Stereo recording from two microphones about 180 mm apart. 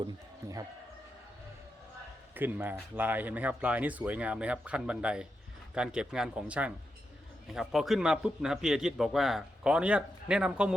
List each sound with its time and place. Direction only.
0.4 s speech: 15° right (ahead or behind)
2.3 s a man's voice: 10° right (ahead or behind)